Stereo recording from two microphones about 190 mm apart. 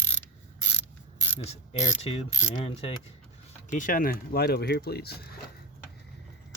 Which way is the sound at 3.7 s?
45° left (ahead or behind).